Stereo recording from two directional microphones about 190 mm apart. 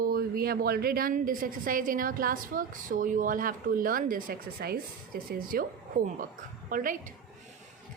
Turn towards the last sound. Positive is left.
turn(degrees=-45)  # may be behind; listen again after turning